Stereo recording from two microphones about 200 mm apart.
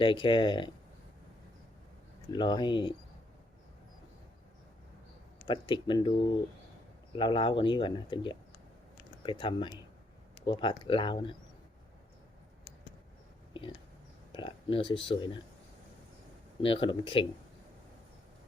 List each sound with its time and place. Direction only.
0.0 s speech: 25° left (ahead or behind)
2.3 s speech: 20° left (ahead or behind)
5.5 s speech: 25° left (ahead or behind)
7.2 s speech: 25° left (ahead or behind)
13.5 s a sound: 25° left (ahead or behind)
14.3 s speech: 25° left (ahead or behind)
16.6 s speech: 25° left (ahead or behind)